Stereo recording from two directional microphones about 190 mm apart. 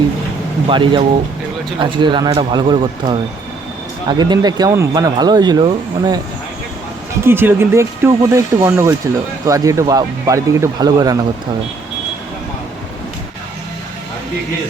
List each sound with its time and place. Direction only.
0.7 s speech: 25° right (ahead or behind)
7.3 s speech: 10° right (ahead or behind)